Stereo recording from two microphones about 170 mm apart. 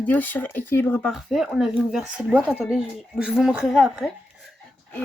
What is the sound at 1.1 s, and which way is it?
Speech, centre (ahead or behind).